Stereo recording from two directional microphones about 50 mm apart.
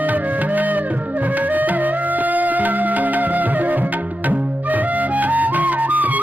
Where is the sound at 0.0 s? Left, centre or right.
Right.